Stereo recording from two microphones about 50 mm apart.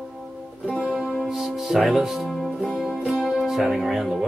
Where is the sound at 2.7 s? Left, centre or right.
Centre.